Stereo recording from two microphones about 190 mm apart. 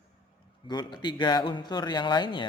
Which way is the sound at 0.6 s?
20° left (ahead or behind).